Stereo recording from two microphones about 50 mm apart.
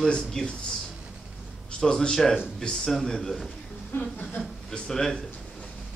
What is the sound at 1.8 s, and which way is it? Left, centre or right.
A man's voice, centre.